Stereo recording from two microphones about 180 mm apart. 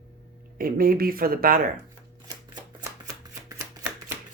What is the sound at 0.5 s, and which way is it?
Speech, 55° right (ahead or behind).